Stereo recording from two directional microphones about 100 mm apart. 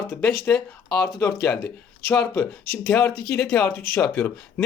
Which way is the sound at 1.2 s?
25° left (ahead or behind).